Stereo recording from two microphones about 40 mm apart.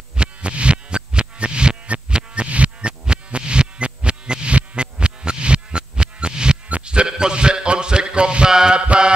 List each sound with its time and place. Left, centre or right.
0.2 s music: right
6.7 s a sound: right
8.8 s mantra: right